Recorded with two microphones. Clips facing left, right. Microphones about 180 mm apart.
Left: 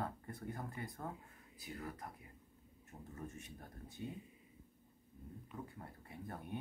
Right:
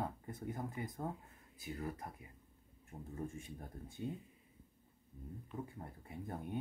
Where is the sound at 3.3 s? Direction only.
25° right (ahead or behind).